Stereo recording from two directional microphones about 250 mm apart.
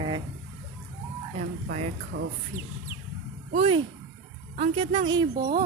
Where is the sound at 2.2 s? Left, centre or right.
Right.